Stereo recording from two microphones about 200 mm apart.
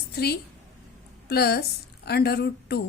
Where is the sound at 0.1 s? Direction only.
55° left (ahead or behind).